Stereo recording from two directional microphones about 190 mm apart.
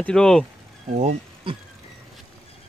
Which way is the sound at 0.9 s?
35° right (ahead or behind).